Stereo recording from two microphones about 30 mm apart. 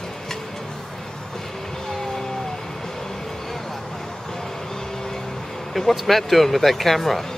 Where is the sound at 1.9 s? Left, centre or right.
Centre.